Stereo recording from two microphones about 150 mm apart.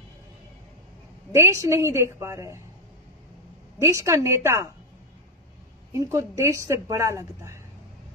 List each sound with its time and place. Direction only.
1.3 s a woman's voice: 20° right (ahead or behind)
3.8 s a woman's voice: 20° right (ahead or behind)
5.9 s a woman's voice: 20° right (ahead or behind)